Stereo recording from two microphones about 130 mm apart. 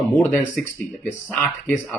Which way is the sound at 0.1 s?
10° left (ahead or behind).